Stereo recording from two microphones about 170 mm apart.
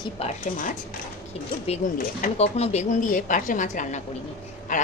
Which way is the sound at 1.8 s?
50° left (ahead or behind).